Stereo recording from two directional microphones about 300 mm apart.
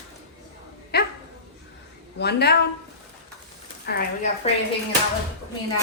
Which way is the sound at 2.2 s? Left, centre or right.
Left.